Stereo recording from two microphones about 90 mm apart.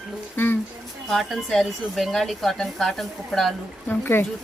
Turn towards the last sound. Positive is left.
turn(degrees=20)  # may be behind; listen again after turning